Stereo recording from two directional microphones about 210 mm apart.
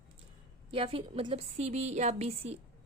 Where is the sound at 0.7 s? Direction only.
25° right (ahead or behind).